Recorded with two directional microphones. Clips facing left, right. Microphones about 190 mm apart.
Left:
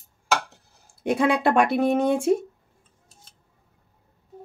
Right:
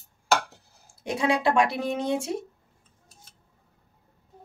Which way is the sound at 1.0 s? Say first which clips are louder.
Left 4 dB; 55° left (ahead or behind).